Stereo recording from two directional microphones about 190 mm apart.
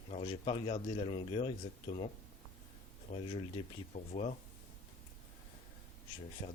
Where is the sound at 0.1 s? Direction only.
30° left (ahead or behind).